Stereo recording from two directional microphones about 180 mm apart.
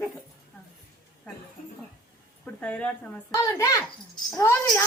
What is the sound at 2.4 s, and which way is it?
Speech, 5° left (ahead or behind).